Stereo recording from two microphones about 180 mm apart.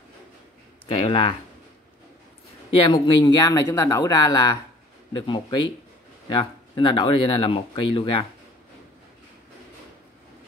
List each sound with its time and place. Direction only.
0.8 s speech: 30° left (ahead or behind)
2.9 s speech: 20° left (ahead or behind)